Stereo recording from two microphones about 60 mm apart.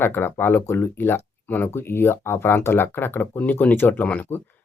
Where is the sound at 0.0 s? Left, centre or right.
Left.